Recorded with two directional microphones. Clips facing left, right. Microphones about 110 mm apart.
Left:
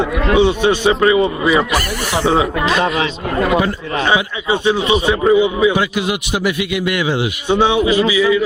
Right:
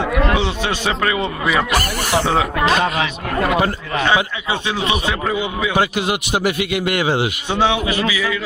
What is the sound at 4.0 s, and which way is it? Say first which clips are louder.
Speech: left 1 dB; 20° left (ahead or behind).